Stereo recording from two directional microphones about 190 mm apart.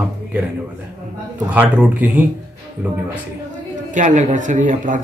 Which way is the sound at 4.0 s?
40° right (ahead or behind).